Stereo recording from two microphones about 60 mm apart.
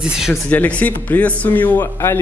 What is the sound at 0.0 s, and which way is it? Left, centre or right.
Speech, centre.